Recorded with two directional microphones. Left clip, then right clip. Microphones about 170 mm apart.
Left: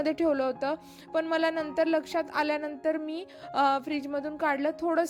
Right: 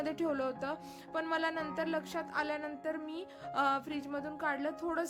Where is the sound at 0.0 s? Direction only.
30° left (ahead or behind).